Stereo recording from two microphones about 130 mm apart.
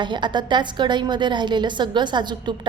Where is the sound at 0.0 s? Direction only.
35° right (ahead or behind).